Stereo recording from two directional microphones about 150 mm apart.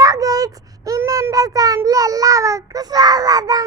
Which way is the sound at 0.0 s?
25° right (ahead or behind).